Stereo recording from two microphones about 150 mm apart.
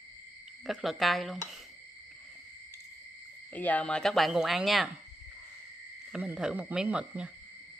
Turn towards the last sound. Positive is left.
turn(degrees=-5)  # may be behind; listen again after turning